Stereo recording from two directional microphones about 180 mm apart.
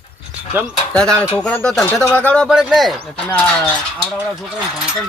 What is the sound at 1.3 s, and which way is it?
A man's voice, 5° left (ahead or behind).